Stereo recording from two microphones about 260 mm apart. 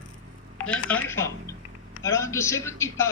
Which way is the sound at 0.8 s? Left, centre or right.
Centre.